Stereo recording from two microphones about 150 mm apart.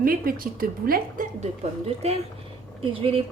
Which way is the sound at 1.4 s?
45° right (ahead or behind).